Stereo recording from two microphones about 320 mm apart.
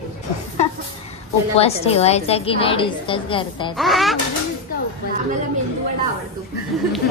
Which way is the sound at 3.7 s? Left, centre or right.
Centre.